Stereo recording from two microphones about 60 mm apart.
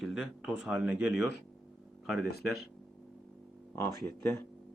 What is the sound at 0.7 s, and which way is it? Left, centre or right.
Speech, right.